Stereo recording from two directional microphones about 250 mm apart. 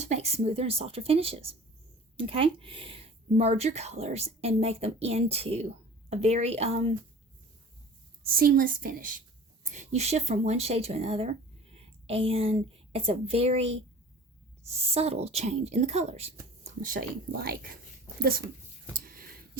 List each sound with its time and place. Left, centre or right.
0.0 s speech: right
8.2 s a woman's voice: right
14.7 s a woman's voice: right
18.9 s a sound: right